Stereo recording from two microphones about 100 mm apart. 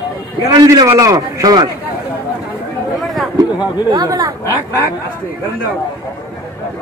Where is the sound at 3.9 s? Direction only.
40° right (ahead or behind).